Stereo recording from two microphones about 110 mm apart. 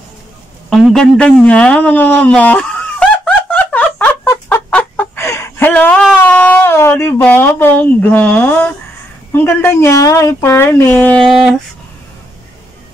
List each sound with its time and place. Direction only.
0.7 s speech: 5° left (ahead or behind)
3.5 s fowl: 15° left (ahead or behind)
5.6 s a sound: 15° left (ahead or behind)
9.3 s speech: 20° left (ahead or behind)